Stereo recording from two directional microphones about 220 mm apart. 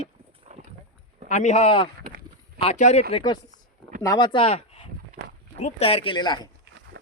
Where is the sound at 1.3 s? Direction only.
35° left (ahead or behind).